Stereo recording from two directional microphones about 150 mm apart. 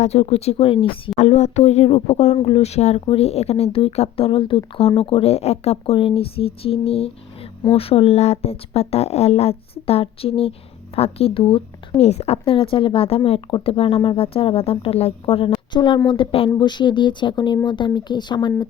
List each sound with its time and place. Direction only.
0.0 s speech: 45° left (ahead or behind)
1.2 s speech: 50° left (ahead or behind); by 18.3 s 30° left (ahead or behind)